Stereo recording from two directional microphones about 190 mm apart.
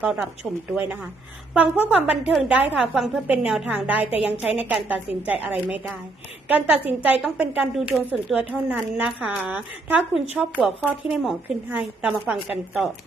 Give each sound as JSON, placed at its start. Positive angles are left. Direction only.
{"t": 0.0, "sound": "a woman's voice", "side_deg": -5}
{"t": 1.8, "sound": "a woman's voice", "side_deg": -5}